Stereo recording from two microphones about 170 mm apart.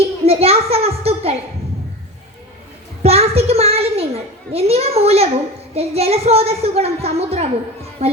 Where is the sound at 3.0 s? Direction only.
35° right (ahead or behind).